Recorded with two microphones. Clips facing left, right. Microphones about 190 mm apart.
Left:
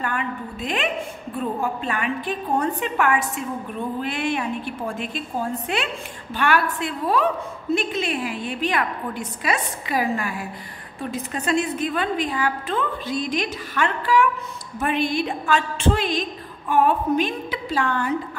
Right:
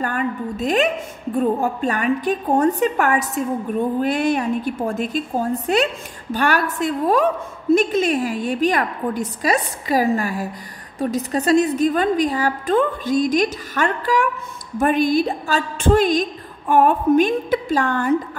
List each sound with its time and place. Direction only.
0.0 s a woman's voice: 40° right (ahead or behind)